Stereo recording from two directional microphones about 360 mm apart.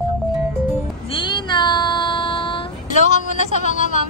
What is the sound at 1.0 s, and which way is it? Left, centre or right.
Child singing, centre.